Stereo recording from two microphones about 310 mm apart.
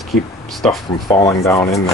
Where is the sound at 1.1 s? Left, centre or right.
Centre.